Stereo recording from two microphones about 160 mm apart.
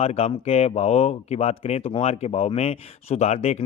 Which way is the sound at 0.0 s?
40° left (ahead or behind).